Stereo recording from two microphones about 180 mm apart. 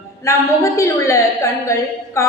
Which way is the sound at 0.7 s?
15° left (ahead or behind).